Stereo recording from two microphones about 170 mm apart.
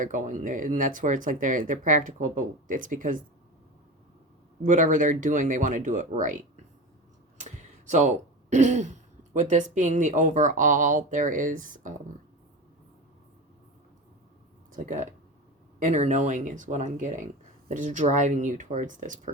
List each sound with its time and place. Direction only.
0.0 s speech: 50° right (ahead or behind)
4.6 s speech: 50° right (ahead or behind)
14.7 s speech: 50° right (ahead or behind)